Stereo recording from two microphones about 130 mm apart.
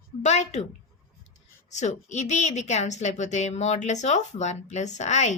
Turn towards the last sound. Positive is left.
turn(degrees=60)  # may be behind; listen again after turning